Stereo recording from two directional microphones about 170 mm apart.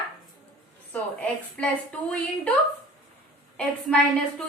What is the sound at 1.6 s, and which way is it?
Speech, 5° left (ahead or behind).